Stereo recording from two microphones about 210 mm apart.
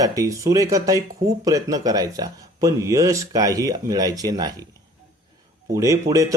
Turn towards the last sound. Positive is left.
turn(degrees=-15)  # may be behind; listen again after turning